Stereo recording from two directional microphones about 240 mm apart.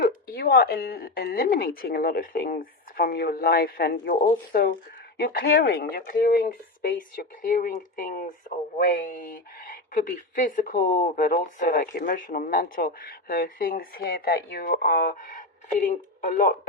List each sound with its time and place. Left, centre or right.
0.3 s speech: left